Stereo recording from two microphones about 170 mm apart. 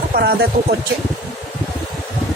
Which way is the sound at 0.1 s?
60° right (ahead or behind).